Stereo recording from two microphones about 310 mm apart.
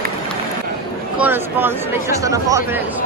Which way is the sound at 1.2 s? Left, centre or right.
Centre.